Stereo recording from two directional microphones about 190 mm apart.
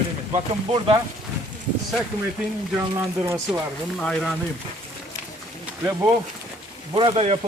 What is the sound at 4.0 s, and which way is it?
Speech, 5° left (ahead or behind).